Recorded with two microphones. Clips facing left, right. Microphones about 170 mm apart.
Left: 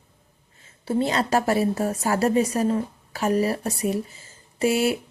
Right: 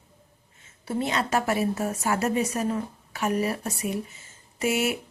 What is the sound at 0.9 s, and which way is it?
A woman's voice, 30° left (ahead or behind).